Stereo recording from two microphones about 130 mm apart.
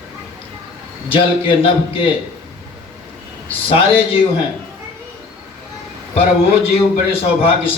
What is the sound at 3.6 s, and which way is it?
Speech, 45° left (ahead or behind).